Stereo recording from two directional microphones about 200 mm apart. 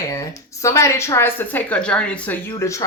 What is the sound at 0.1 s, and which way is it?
Speech, 15° left (ahead or behind).